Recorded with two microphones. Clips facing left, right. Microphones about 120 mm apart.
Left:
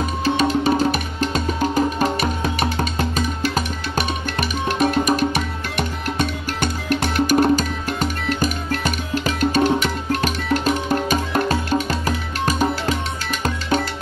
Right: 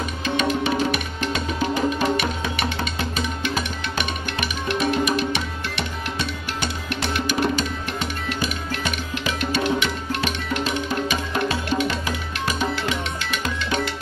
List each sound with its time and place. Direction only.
0.2 s music: 35° left (ahead or behind)